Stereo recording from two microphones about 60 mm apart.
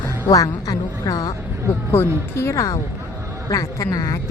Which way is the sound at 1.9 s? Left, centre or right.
Left.